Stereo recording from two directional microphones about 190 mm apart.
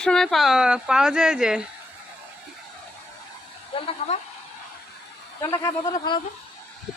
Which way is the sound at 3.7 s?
30° left (ahead or behind).